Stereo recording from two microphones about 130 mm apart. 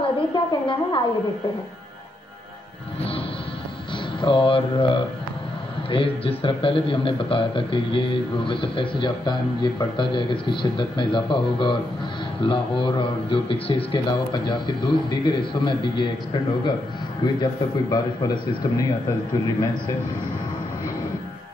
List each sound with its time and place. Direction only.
0.0 s a woman's voice: 40° left (ahead or behind)
3.0 s music: 45° left (ahead or behind)
4.2 s a man's voice: 40° left (ahead or behind)
17.2 s a man's voice: 30° left (ahead or behind)